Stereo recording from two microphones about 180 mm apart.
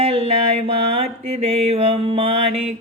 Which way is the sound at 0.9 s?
35° right (ahead or behind).